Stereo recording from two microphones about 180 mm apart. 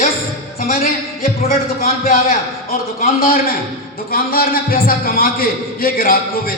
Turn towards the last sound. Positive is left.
turn(degrees=55)  # may be behind; listen again after turning